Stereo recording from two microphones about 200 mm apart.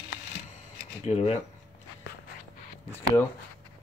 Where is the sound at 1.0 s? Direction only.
30° left (ahead or behind).